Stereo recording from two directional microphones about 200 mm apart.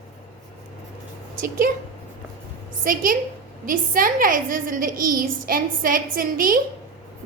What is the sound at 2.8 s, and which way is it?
A woman's voice, 45° right (ahead or behind).